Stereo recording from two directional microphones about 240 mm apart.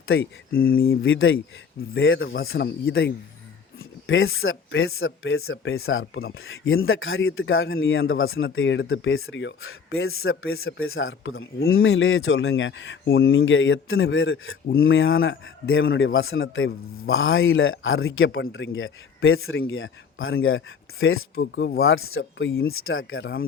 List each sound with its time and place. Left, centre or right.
0.1 s a man's voice: left
0.6 s speech: left
0.9 s a man's voice: left
22.2 s a man's voice: left